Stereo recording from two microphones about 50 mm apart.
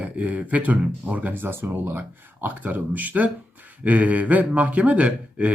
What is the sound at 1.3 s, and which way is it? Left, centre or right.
Speech, right.